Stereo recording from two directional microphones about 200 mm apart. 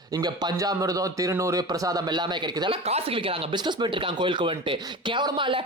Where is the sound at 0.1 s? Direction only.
20° right (ahead or behind).